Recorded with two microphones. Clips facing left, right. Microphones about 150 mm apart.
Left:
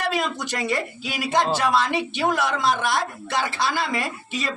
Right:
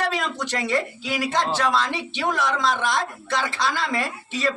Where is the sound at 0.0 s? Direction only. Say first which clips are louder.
Even; 10° left (ahead or behind).